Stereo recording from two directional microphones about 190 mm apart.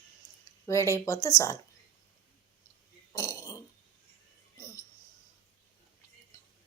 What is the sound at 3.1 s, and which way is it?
Burping, 15° left (ahead or behind).